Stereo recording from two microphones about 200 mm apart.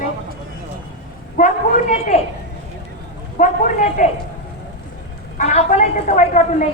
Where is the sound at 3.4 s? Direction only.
40° left (ahead or behind).